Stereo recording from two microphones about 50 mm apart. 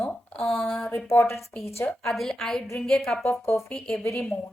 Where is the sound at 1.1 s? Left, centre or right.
Left.